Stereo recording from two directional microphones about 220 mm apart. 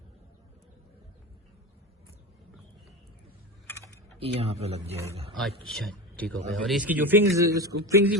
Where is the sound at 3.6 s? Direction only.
10° left (ahead or behind).